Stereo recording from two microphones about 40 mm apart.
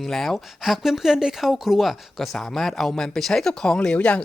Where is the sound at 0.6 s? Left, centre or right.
Centre.